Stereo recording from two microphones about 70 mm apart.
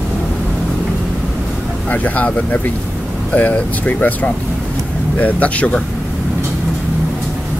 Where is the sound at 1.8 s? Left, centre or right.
Left.